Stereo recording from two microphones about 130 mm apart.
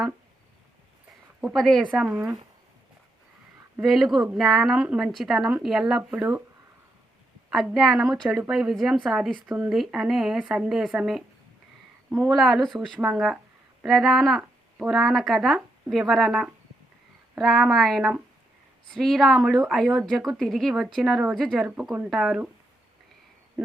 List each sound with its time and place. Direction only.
1.4 s a woman's voice: centre (ahead or behind)
2.0 s speech: 15° right (ahead or behind)
3.8 s a woman's voice: centre (ahead or behind)
7.5 s a woman's voice: centre (ahead or behind)
12.3 s a woman's voice: centre (ahead or behind)